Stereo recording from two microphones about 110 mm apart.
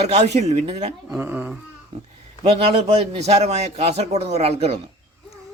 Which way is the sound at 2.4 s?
65° right (ahead or behind).